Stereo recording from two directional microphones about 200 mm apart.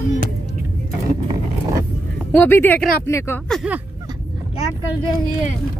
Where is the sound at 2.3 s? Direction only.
10° left (ahead or behind).